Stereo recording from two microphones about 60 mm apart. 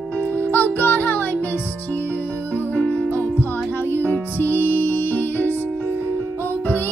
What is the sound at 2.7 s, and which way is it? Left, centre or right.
Music, left.